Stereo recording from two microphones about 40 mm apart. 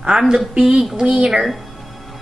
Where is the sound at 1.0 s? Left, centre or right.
Centre.